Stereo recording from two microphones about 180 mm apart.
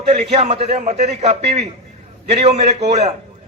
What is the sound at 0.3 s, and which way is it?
A man's voice, 35° right (ahead or behind).